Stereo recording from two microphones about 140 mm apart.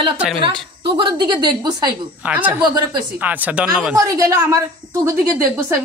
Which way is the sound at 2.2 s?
10° right (ahead or behind).